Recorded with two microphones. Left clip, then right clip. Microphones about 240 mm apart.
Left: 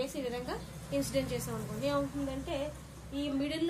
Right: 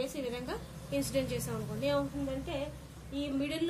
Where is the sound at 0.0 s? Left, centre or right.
Centre.